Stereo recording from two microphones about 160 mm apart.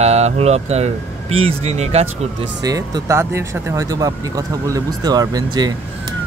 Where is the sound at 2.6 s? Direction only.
20° right (ahead or behind).